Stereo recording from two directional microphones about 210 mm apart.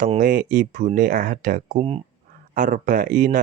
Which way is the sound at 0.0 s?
40° right (ahead or behind).